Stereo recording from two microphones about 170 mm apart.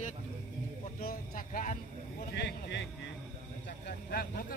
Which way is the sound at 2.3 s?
90° left.